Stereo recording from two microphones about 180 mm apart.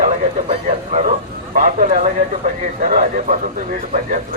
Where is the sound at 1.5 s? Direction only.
45° right (ahead or behind).